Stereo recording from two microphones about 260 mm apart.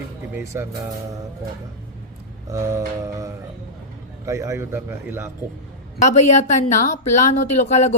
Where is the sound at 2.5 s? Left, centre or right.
Centre.